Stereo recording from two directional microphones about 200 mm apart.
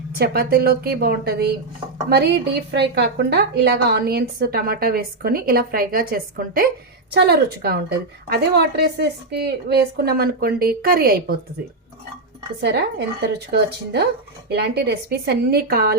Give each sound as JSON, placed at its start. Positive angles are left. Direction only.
{"t": 0.2, "sound": "a woman's voice", "side_deg": -50}
{"t": 13.5, "sound": "a woman's voice", "side_deg": -55}